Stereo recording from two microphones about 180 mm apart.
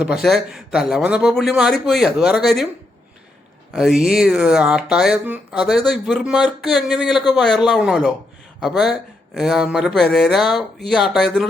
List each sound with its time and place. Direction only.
0.0 s speech: centre (ahead or behind)
3.7 s speech: centre (ahead or behind)